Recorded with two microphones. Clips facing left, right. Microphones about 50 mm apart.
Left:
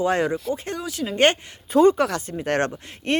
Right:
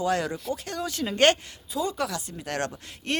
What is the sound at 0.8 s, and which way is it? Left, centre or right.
Speech, centre.